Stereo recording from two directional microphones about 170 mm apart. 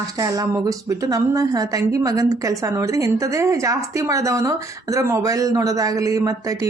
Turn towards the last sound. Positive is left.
turn(degrees=-20)  # may be behind; listen again after turning